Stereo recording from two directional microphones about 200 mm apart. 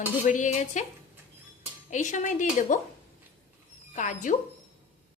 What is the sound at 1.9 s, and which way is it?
Speech, 40° left (ahead or behind).